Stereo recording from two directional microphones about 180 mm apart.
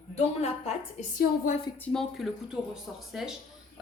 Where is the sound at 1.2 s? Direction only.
50° left (ahead or behind).